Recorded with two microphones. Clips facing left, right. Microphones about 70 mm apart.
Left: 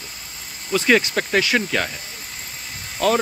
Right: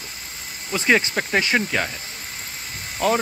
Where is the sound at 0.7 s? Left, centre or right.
Centre.